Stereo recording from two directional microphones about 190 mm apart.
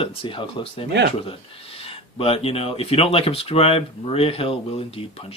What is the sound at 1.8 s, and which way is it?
Speech, 30° left (ahead or behind).